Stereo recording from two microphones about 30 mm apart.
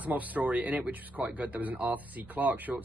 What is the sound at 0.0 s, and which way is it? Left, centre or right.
Speech, right.